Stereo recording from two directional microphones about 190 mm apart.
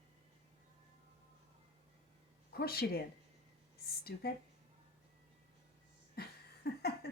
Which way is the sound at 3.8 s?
55° left (ahead or behind).